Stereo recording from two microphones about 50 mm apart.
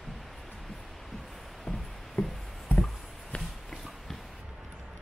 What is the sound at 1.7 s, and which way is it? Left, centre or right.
Music, left.